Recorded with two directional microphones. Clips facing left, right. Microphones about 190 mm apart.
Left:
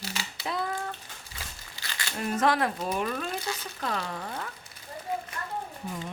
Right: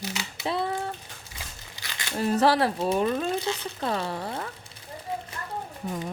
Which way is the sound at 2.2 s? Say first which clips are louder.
Right 4 dB; 30° right (ahead or behind).